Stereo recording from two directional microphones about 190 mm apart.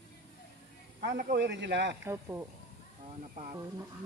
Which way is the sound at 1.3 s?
65° right (ahead or behind).